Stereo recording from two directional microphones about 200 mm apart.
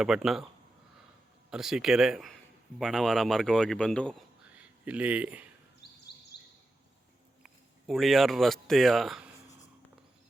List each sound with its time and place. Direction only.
0.0 s a man's voice: 5° right (ahead or behind)
1.5 s a man's voice: 5° right (ahead or behind)
4.5 s speech: 5° right (ahead or behind)
5.8 s a sound: 55° left (ahead or behind)
7.4 s speech: centre (ahead or behind)